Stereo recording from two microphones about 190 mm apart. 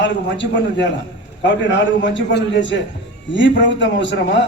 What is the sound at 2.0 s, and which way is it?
A man's voice, 70° left (ahead or behind).